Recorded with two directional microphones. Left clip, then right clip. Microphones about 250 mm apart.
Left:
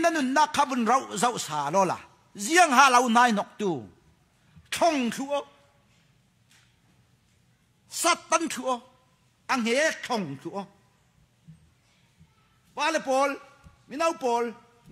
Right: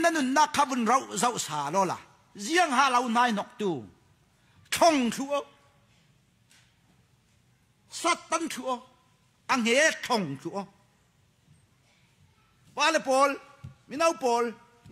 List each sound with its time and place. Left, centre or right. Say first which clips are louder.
0.0 s speech: left 1 dB; centre
4.6 s a man's voice: right 2 dB; centre
7.9 s a man's voice: left 3 dB; centre
9.5 s a man's voice: right 1 dB; centre
12.7 s a man's voice: right 1 dB; centre